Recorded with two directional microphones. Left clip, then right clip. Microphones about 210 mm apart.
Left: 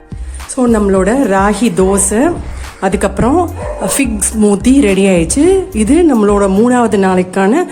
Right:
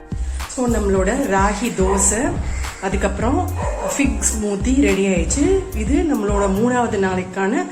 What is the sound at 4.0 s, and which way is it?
Music, 55° left (ahead or behind).